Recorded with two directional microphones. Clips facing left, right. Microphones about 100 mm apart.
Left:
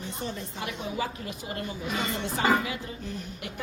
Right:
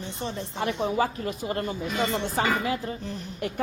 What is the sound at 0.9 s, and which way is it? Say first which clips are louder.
A woman's voice: right 6 dB; 45° right (ahead or behind).